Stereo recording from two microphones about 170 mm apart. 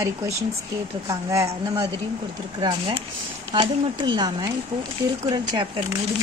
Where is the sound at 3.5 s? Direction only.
30° right (ahead or behind).